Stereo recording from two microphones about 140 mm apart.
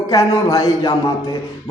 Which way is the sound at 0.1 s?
25° left (ahead or behind).